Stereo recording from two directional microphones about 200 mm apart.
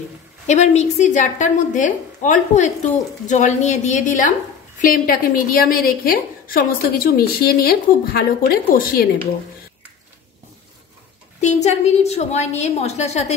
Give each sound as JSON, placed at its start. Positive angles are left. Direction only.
{"t": 0.5, "sound": "a woman's voice", "side_deg": 35}
{"t": 11.4, "sound": "a woman's voice", "side_deg": 35}